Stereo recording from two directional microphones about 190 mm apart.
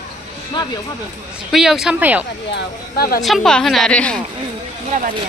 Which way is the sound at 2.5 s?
55° left (ahead or behind).